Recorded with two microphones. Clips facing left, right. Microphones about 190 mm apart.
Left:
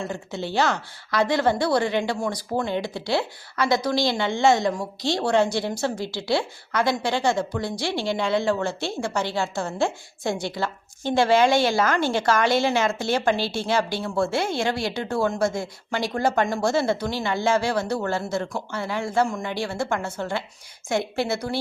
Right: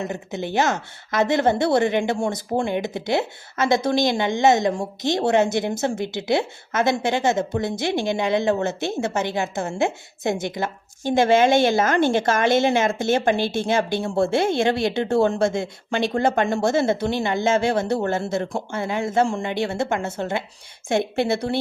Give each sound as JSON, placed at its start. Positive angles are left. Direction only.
{"t": 0.0, "sound": "a woman's voice", "side_deg": -20}
{"t": 2.6, "sound": "a woman's voice", "side_deg": -15}